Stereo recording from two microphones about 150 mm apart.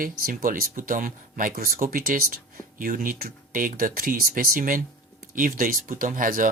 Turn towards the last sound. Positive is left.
turn(degrees=-65)  # may be behind; listen again after turning